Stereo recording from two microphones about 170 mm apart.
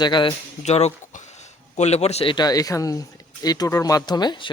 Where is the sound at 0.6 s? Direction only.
40° left (ahead or behind).